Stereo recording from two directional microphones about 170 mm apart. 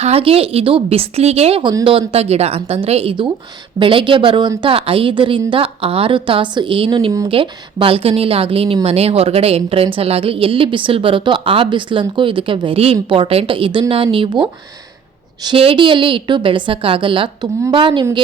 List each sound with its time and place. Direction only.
0.0 s a woman's voice: 35° right (ahead or behind)